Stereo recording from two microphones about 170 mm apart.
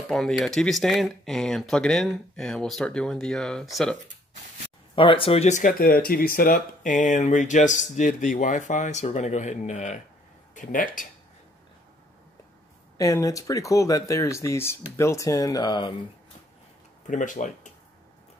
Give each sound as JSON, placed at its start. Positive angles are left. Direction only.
{"t": 0.1, "sound": "speech", "side_deg": 5}
{"t": 4.9, "sound": "speech", "side_deg": 30}
{"t": 12.9, "sound": "speech", "side_deg": 20}
{"t": 17.1, "sound": "speech", "side_deg": 50}